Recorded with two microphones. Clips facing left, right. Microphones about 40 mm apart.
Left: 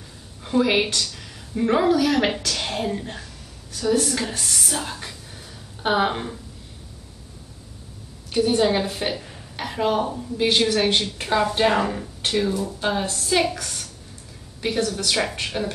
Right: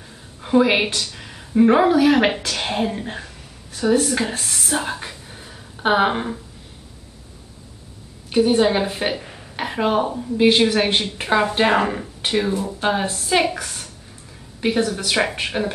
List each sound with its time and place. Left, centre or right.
0.4 s a woman's voice: centre
4.7 s a sound: right
8.3 s a woman's voice: centre